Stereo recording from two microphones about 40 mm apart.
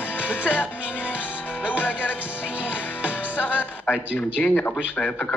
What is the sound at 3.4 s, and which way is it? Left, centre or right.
Speech, left.